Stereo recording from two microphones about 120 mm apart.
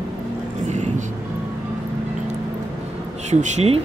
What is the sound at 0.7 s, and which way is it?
Vehicle, 85° right.